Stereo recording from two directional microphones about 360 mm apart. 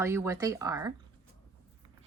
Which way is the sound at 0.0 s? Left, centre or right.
Centre.